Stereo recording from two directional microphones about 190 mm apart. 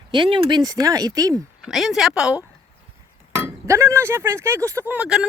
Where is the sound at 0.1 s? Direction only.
25° right (ahead or behind).